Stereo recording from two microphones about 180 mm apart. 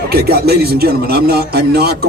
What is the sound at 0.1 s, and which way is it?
Speech, 60° right (ahead or behind).